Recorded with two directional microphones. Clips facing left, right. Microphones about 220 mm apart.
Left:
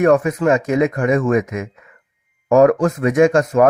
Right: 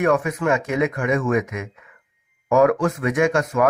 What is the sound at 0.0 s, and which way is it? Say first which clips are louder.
Speech: left 6 dB; 40° left (ahead or behind).